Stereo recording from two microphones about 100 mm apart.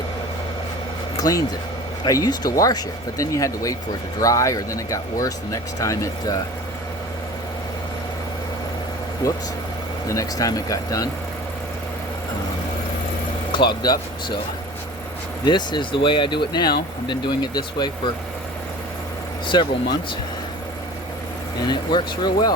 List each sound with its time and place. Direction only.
1.1 s speech: 35° left (ahead or behind)
10.1 s speech: 35° left (ahead or behind)
13.5 s speech: 50° left (ahead or behind)
15.4 s speech: 50° left (ahead or behind)
19.5 s speech: 45° left (ahead or behind)
21.7 s speech: 45° left (ahead or behind)